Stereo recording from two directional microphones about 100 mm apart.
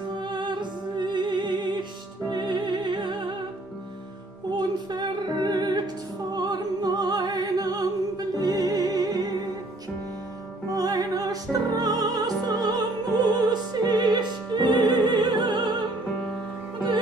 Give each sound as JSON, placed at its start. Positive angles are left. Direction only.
{"t": 0.3, "sound": "music", "side_deg": -50}
{"t": 4.6, "sound": "music", "side_deg": -45}
{"t": 10.7, "sound": "music", "side_deg": -40}